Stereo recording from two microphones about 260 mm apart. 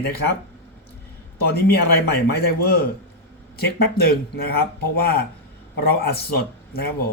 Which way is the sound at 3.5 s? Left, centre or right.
Left.